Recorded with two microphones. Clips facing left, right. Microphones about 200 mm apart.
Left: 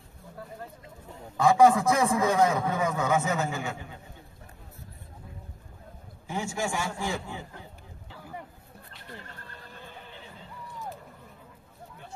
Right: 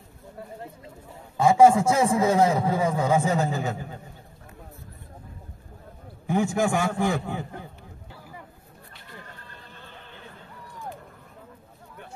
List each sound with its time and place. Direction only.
1.3 s a man's voice: 25° right (ahead or behind)
6.2 s a man's voice: 55° right (ahead or behind)